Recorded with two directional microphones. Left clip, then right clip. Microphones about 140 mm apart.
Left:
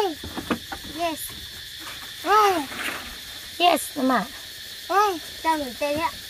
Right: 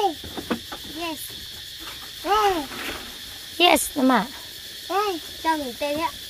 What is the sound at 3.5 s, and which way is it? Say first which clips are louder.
Speech: right 2 dB; 50° right (ahead or behind).